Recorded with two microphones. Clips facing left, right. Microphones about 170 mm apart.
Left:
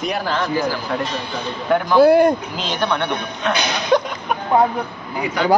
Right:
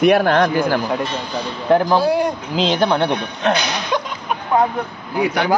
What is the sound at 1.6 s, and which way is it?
Speech, 30° right (ahead or behind).